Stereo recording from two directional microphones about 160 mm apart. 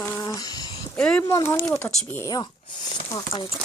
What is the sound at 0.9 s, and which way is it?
Speech, 5° left (ahead or behind).